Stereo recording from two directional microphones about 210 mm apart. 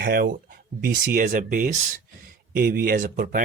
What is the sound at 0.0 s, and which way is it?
Speech, 45° right (ahead or behind).